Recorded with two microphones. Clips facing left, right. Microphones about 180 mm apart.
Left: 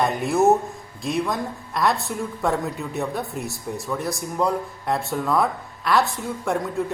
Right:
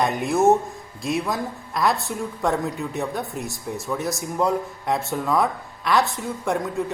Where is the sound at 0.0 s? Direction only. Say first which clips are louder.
Even; centre (ahead or behind).